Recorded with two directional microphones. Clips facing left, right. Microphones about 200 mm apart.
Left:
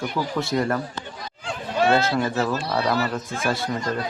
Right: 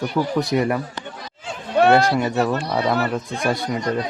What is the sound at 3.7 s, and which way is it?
Speech, 20° right (ahead or behind).